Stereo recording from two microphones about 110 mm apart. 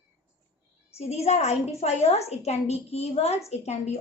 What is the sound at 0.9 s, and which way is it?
A woman's voice, 80° left.